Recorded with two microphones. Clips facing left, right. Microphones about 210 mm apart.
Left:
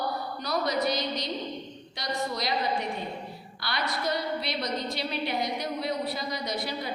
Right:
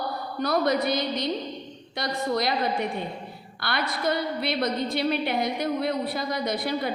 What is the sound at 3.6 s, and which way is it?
A woman's voice, 55° right (ahead or behind).